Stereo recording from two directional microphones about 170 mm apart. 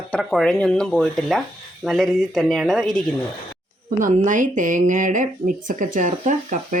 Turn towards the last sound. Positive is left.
turn(degrees=-50)  # may be behind; listen again after turning